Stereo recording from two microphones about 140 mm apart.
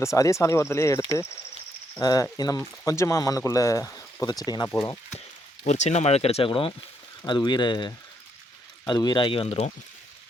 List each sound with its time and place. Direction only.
0.0 s speech: 20° left (ahead or behind)
5.6 s speech: 55° left (ahead or behind)